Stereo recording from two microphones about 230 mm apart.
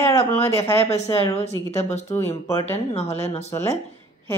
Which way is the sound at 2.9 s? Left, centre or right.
Left.